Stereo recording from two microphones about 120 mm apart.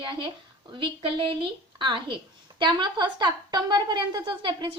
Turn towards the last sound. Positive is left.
turn(degrees=-40)  # may be behind; listen again after turning